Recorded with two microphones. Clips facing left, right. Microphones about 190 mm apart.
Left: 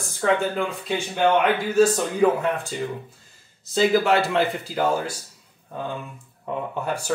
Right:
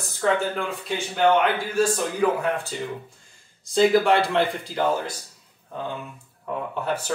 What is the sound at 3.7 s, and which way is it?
Speech, 5° left (ahead or behind).